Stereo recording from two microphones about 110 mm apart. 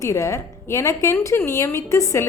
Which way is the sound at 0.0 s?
25° left (ahead or behind).